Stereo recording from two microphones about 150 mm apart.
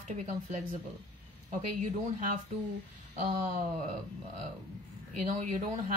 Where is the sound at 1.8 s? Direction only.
60° right (ahead or behind).